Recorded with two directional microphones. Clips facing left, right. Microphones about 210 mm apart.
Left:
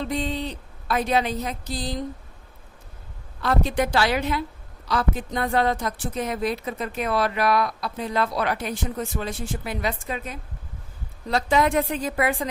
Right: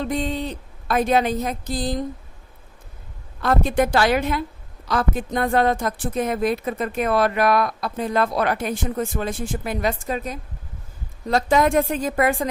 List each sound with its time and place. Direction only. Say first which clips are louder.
0.0 s a woman's voice: right 2 dB; 50° right (ahead or behind)
3.4 s a woman's voice: right 3 dB; 50° right (ahead or behind)